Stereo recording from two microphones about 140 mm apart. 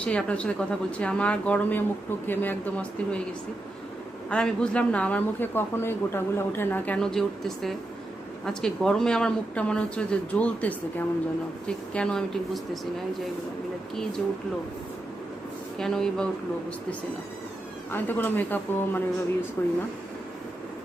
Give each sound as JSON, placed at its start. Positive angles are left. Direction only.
{"t": 0.0, "sound": "speech", "side_deg": 10}
{"t": 4.3, "sound": "speech", "side_deg": 5}
{"t": 15.8, "sound": "speech", "side_deg": 5}
{"t": 17.9, "sound": "speech", "side_deg": 15}